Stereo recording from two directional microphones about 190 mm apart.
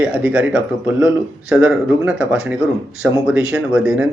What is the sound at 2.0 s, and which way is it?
Speech, 5° right (ahead or behind).